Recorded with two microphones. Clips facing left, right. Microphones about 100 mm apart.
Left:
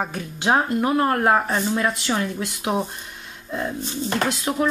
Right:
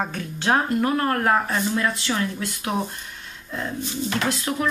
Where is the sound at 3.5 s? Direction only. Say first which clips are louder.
Left 3 dB; 15° left (ahead or behind).